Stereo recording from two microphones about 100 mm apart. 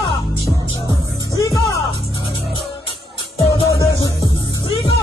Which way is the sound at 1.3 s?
35° left (ahead or behind).